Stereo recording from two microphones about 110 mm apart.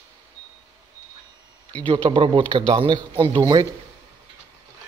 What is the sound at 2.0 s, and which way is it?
A man's voice, 50° right (ahead or behind).